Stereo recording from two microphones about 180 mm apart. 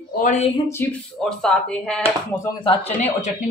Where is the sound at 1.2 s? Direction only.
5° left (ahead or behind).